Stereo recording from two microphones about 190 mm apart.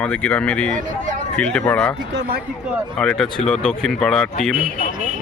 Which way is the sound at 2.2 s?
55° right (ahead or behind).